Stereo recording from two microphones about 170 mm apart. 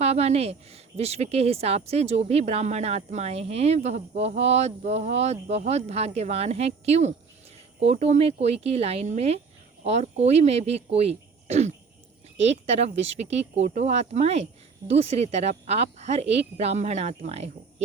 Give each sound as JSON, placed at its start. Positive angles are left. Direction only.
{"t": 0.0, "sound": "a woman's voice", "side_deg": -40}